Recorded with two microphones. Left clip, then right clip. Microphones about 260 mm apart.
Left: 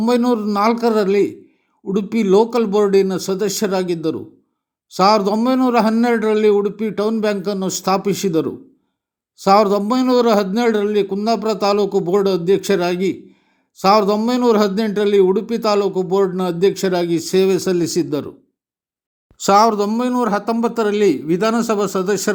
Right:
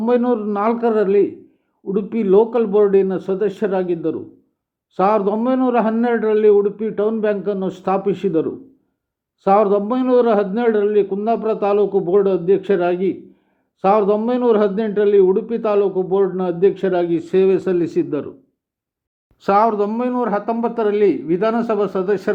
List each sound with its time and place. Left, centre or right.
0.0 s a man's voice: left
19.4 s a man's voice: left